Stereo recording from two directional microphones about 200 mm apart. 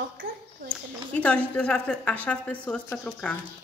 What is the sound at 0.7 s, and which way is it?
Speech, 5° left (ahead or behind).